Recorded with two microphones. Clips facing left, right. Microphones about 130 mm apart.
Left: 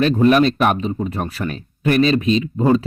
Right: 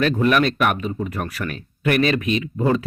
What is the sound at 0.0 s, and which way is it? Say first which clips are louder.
Speech: left 4 dB; 30° left (ahead or behind).